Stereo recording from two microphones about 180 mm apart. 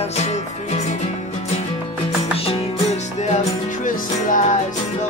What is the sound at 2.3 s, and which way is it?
Music, 30° left (ahead or behind).